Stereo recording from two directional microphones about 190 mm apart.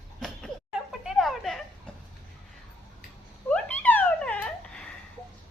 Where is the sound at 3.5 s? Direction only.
10° left (ahead or behind).